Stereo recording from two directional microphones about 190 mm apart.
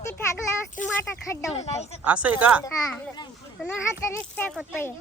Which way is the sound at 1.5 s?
35° left (ahead or behind).